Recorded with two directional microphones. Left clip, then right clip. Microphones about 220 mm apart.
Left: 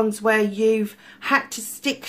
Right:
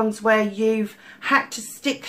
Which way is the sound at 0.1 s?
45° left (ahead or behind).